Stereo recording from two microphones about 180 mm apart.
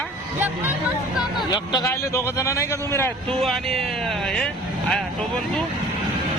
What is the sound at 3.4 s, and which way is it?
Speech, centre (ahead or behind).